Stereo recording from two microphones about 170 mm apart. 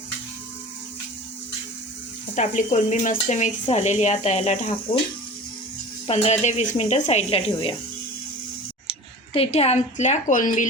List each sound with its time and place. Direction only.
2.3 s speech: 50° left (ahead or behind)
6.1 s speech: 40° left (ahead or behind)
8.9 s speech: 35° left (ahead or behind)